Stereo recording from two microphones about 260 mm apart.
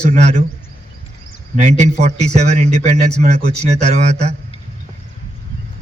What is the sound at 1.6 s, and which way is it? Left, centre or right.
A man's voice, right.